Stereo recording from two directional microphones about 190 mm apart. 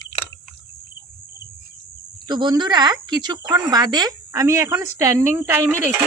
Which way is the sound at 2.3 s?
25° right (ahead or behind).